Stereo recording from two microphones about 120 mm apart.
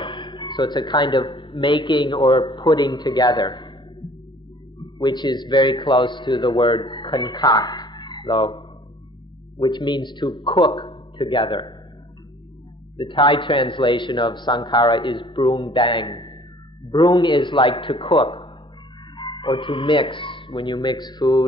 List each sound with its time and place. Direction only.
0.0 s a man's voice: 40° left (ahead or behind)
4.9 s a man's voice: 40° left (ahead or behind)
12.9 s a man's voice: 40° left (ahead or behind)